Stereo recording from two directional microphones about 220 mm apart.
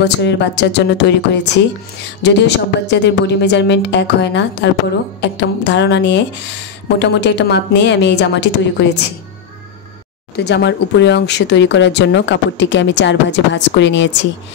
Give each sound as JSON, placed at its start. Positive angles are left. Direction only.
{"t": 0.0, "sound": "speech", "side_deg": 50}
{"t": 10.3, "sound": "speech", "side_deg": 50}